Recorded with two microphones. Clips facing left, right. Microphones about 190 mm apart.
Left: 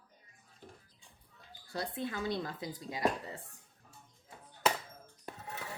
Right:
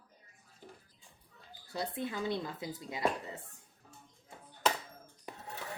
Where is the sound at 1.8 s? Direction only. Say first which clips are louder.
Right 1 dB; 20° right (ahead or behind).